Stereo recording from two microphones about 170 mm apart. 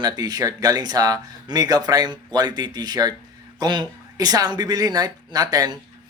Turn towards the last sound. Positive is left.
turn(degrees=-20)  # may be behind; listen again after turning